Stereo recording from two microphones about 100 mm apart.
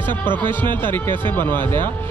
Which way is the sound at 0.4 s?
20° left (ahead or behind).